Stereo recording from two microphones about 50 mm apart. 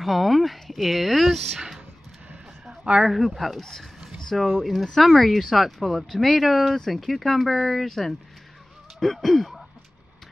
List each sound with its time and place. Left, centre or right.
0.0 s speech: centre
2.8 s speech: centre
3.1 s speech: centre